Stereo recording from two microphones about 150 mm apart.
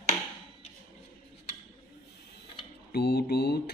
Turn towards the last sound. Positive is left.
turn(degrees=90)